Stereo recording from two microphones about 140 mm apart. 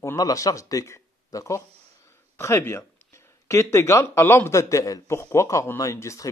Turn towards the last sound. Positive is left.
turn(degrees=20)  # may be behind; listen again after turning